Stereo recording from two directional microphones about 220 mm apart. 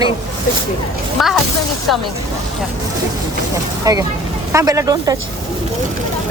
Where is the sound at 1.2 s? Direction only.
Centre (ahead or behind).